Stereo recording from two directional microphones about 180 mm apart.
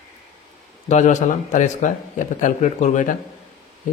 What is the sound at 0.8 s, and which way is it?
A man's voice, 40° left (ahead or behind).